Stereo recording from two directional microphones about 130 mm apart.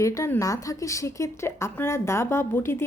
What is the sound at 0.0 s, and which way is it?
A woman's voice, 25° left (ahead or behind).